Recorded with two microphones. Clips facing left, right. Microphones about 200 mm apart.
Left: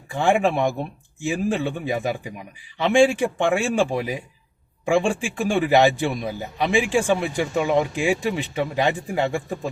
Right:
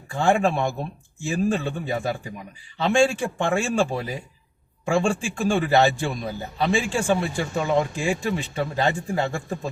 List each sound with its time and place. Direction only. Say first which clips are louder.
0.1 s a man's voice: left 1 dB; 15° left (ahead or behind)